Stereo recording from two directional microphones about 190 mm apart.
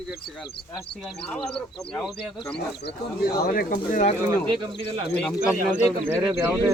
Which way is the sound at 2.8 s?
60° left (ahead or behind).